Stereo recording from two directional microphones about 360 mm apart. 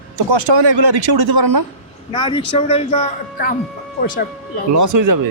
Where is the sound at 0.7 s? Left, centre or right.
Right.